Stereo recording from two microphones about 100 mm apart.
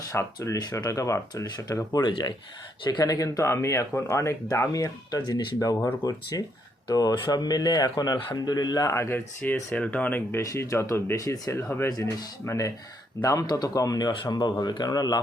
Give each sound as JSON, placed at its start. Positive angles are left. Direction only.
{"t": 0.1, "sound": "speech", "side_deg": 30}
{"t": 3.0, "sound": "speech", "side_deg": 35}
{"t": 5.5, "sound": "speech", "side_deg": 35}
{"t": 9.0, "sound": "speech", "side_deg": 25}
{"t": 9.4, "sound": "speech", "side_deg": 15}
{"t": 10.4, "sound": "speech", "side_deg": 30}
{"t": 11.9, "sound": "speech", "side_deg": 35}